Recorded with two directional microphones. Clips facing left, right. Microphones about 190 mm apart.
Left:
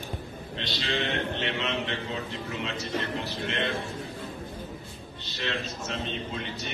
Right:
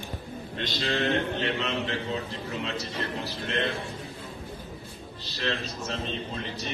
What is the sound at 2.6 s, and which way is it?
Speech, 35° right (ahead or behind).